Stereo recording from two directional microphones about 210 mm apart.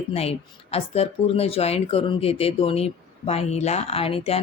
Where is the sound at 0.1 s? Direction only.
30° left (ahead or behind).